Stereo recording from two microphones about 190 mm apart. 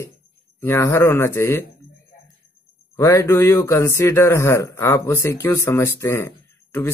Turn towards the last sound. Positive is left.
turn(degrees=10)  # may be behind; listen again after turning